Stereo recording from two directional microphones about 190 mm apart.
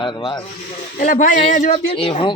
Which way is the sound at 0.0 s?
25° left (ahead or behind).